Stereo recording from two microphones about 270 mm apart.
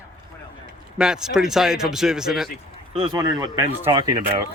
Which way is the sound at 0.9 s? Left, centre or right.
Centre.